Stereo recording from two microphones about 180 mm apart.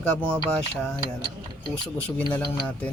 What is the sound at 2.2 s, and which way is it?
Speech, 5° left (ahead or behind).